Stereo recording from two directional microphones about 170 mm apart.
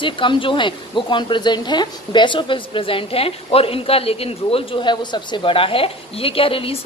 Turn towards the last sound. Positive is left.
turn(degrees=35)  # may be behind; listen again after turning